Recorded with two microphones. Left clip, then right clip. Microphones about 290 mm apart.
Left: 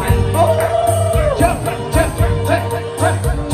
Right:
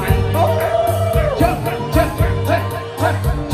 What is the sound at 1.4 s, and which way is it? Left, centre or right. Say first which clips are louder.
Music: left 1 dB; left.